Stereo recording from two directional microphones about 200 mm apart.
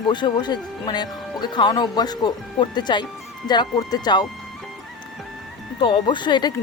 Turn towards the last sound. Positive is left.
turn(degrees=20)  # may be behind; listen again after turning